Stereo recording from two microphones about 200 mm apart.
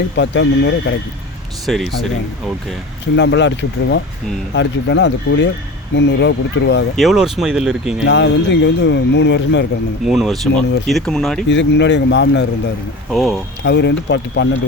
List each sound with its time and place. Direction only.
0.2 s speech: 65° left (ahead or behind)
1.6 s speech: centre (ahead or behind)
3.2 s speech: 60° left (ahead or behind)
6.9 s speech: centre (ahead or behind)
8.0 s speech: 60° left (ahead or behind)
10.1 s speech: centre (ahead or behind)
11.4 s speech: 60° left (ahead or behind)
13.1 s speech: centre (ahead or behind)
13.7 s speech: 60° left (ahead or behind)